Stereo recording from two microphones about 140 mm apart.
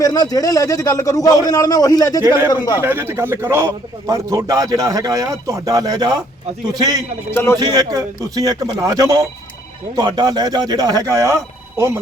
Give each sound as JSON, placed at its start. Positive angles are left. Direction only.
{"t": 0.0, "sound": "a man's voice", "side_deg": 25}
{"t": 2.2, "sound": "a man's voice", "side_deg": -15}
{"t": 2.5, "sound": "a man's voice", "side_deg": 25}
{"t": 2.8, "sound": "a man's voice", "side_deg": -15}
{"t": 7.3, "sound": "speech", "side_deg": 15}
{"t": 7.6, "sound": "a man's voice", "side_deg": -25}